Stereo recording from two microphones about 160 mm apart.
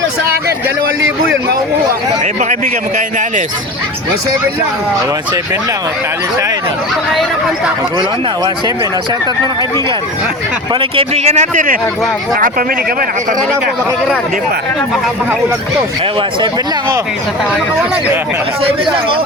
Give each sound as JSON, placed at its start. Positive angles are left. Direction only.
{"t": 2.2, "sound": "speech", "side_deg": -50}
{"t": 10.8, "sound": "speech", "side_deg": -40}